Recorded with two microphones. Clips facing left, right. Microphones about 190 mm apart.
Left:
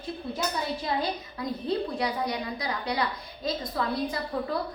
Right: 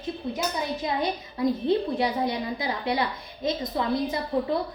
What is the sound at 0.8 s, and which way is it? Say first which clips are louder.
A woman's voice: right 2 dB; 25° right (ahead or behind).